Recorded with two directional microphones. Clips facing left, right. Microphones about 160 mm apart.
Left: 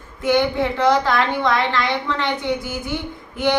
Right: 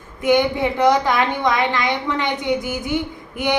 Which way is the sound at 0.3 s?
15° right (ahead or behind).